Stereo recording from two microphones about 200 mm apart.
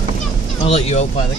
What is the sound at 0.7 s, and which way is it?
Speech, 30° left (ahead or behind).